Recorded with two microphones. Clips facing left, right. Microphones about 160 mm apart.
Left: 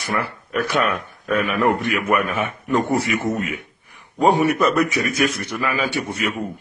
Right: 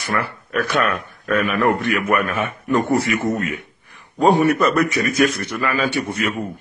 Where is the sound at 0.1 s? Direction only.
15° left (ahead or behind).